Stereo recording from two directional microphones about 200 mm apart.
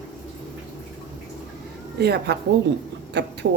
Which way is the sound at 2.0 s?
55° right (ahead or behind).